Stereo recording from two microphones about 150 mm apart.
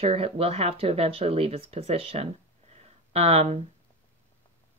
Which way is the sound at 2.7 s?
45° right (ahead or behind).